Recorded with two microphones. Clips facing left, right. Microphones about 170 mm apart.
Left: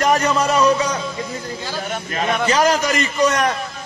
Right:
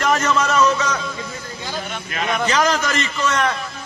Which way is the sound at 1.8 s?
45° left (ahead or behind).